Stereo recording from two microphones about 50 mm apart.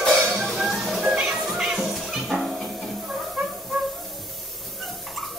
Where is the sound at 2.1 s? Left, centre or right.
Centre.